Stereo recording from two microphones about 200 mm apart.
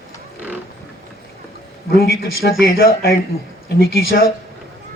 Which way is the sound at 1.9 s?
50° left (ahead or behind).